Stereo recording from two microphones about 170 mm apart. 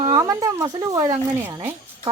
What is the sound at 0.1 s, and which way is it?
Speech, 20° right (ahead or behind).